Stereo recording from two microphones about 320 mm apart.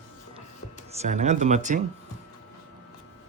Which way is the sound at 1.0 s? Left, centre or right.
Right.